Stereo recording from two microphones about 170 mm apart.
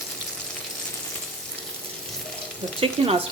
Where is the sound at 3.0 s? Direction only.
35° right (ahead or behind).